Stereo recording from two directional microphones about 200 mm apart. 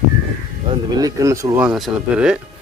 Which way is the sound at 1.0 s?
15° right (ahead or behind).